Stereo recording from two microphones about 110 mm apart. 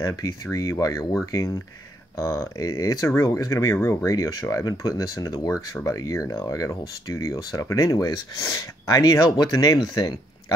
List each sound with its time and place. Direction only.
0.0 s speech: 30° left (ahead or behind)